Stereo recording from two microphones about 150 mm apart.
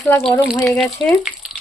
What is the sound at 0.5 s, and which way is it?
Speech, 15° left (ahead or behind).